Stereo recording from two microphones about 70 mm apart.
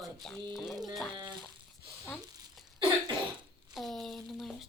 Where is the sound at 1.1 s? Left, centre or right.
Right.